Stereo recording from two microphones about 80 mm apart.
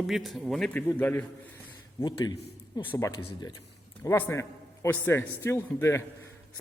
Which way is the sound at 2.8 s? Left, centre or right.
Left.